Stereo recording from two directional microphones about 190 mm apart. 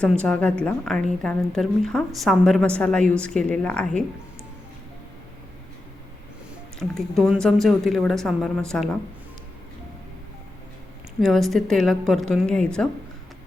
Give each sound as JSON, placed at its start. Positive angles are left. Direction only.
{"t": 0.0, "sound": "a woman's voice", "side_deg": 5}
{"t": 6.7, "sound": "a woman's voice", "side_deg": 0}
{"t": 11.2, "sound": "a woman's voice", "side_deg": 0}